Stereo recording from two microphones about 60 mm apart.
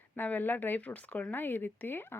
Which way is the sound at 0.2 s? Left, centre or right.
Left.